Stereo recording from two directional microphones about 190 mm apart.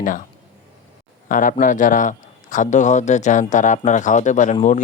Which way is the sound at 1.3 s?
45° left (ahead or behind).